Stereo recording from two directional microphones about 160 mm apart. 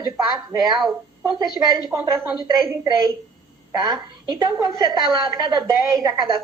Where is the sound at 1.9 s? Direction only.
15° right (ahead or behind).